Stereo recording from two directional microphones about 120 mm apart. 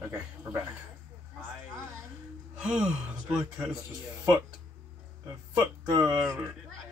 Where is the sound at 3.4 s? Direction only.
25° right (ahead or behind).